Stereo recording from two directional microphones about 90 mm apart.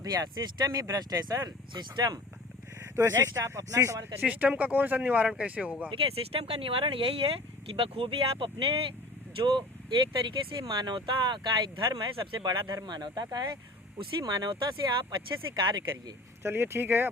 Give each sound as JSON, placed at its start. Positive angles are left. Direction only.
{"t": 0.0, "sound": "speech", "side_deg": -45}
{"t": 2.9, "sound": "speech", "side_deg": -35}
{"t": 4.3, "sound": "speech", "side_deg": -15}
{"t": 5.9, "sound": "speech", "side_deg": -90}
{"t": 9.4, "sound": "speech", "side_deg": -65}
{"t": 16.4, "sound": "speech", "side_deg": -25}